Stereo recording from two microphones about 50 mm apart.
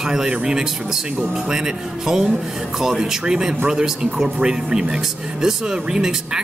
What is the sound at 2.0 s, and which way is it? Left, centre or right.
Speech, centre.